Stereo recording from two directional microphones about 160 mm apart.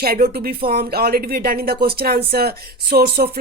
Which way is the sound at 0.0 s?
70° right (ahead or behind).